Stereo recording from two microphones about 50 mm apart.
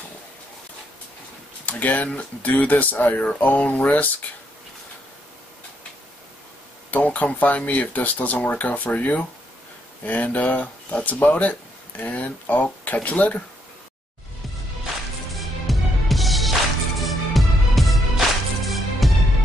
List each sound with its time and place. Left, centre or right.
1.7 s speech: left
6.9 s speech: left
15.6 s music: centre